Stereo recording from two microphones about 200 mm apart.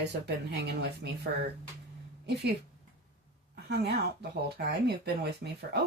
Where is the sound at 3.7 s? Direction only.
55° right (ahead or behind).